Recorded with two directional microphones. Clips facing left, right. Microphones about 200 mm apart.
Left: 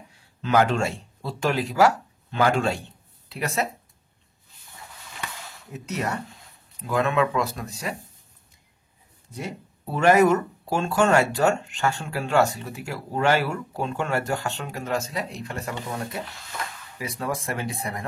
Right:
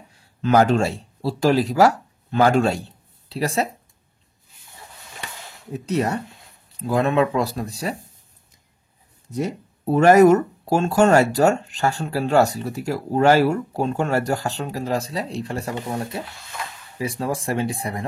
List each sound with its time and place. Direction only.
0.4 s speech: 40° right (ahead or behind)
5.7 s speech: 30° right (ahead or behind)
9.3 s speech: 40° right (ahead or behind)